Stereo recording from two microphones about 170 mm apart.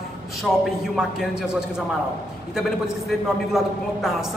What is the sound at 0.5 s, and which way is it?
Speech, 5° right (ahead or behind).